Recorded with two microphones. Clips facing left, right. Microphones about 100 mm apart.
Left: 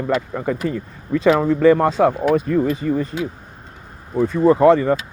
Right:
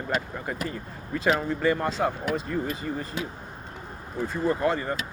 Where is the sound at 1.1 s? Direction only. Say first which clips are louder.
Left 10 dB; 90° left; by 2.4 s 60° left (ahead or behind).